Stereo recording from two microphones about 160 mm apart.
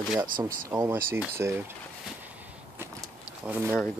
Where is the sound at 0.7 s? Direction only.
20° right (ahead or behind).